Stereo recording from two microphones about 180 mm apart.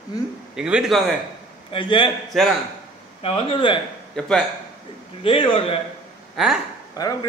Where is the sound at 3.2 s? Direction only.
30° left (ahead or behind).